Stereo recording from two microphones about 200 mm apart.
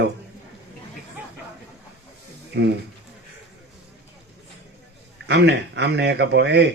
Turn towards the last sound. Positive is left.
turn(degrees=-60)  # may be behind; listen again after turning